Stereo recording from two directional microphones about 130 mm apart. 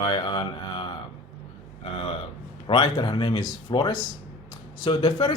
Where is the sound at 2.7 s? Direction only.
35° left (ahead or behind).